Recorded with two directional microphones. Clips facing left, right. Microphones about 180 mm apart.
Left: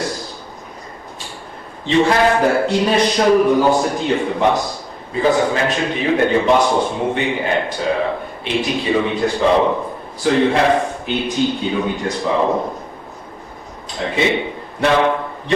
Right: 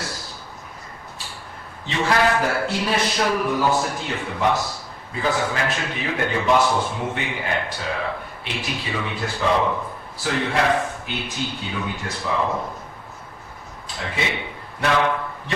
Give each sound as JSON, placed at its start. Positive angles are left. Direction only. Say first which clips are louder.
{"t": 1.9, "sound": "a man's voice", "louder": "left 6 dB", "side_deg": 25}
{"t": 14.0, "sound": "a man's voice", "louder": "left 9 dB", "side_deg": 25}